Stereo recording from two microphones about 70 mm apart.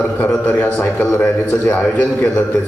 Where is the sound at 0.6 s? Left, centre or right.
Left.